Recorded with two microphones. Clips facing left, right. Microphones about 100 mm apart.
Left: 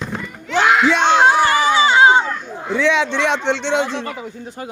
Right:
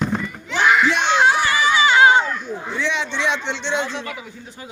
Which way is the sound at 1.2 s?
35° left (ahead or behind).